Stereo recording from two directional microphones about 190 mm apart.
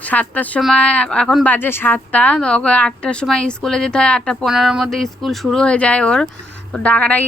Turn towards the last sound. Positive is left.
turn(degrees=5)  # may be behind; listen again after turning